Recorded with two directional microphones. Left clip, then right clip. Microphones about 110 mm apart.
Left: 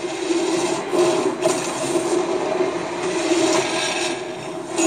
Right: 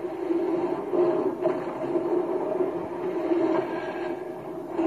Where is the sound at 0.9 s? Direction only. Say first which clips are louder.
Left 5 dB; 30° left (ahead or behind).